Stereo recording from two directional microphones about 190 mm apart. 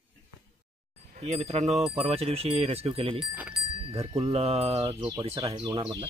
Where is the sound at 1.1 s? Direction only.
35° right (ahead or behind).